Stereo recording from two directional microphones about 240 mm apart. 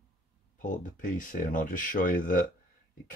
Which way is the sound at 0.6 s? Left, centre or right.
Left.